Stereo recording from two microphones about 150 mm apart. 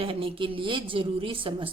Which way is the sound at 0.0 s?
35° right (ahead or behind).